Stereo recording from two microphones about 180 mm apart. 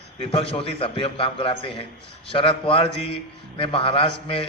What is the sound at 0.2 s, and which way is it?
A man's voice, 35° left (ahead or behind).